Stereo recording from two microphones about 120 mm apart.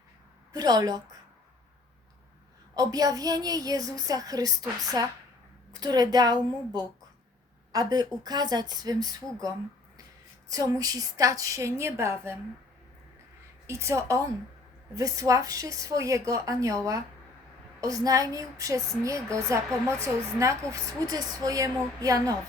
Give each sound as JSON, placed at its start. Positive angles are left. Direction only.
{"t": 0.5, "sound": "a woman's voice", "side_deg": -30}
{"t": 2.7, "sound": "a woman's voice", "side_deg": -30}
{"t": 10.5, "sound": "speech", "side_deg": -30}
{"t": 13.7, "sound": "speech", "side_deg": -25}